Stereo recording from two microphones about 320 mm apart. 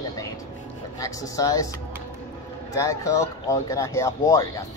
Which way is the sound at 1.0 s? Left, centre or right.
Centre.